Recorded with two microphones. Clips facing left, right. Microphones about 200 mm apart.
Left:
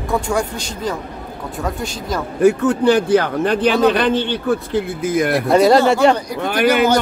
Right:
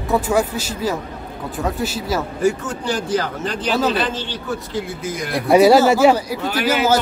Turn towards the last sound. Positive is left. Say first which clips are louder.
# left 4 dB
turn(degrees=60)  # may be behind; listen again after turning